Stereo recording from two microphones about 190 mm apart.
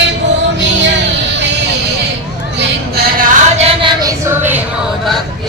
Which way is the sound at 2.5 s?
50° right (ahead or behind).